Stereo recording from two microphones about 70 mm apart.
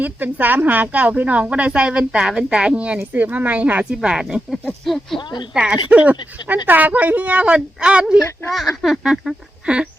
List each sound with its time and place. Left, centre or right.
0.0 s a woman's voice: right
4.1 s speech: centre
5.5 s a woman's voice: centre
8.4 s speech: centre